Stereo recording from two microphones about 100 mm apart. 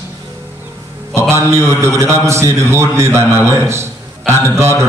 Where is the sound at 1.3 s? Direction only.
25° right (ahead or behind).